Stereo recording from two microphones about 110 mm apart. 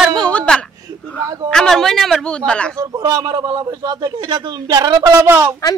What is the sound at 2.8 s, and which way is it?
A man's voice, 35° right (ahead or behind).